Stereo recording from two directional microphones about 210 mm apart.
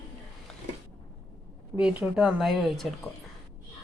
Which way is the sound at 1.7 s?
5° right (ahead or behind).